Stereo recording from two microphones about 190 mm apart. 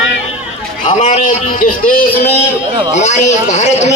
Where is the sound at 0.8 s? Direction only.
40° left (ahead or behind).